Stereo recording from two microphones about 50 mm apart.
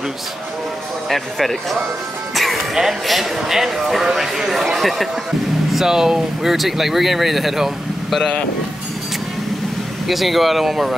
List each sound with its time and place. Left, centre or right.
1.0 s speech: centre
2.3 s music: centre
2.7 s speech: centre
10.0 s speech: centre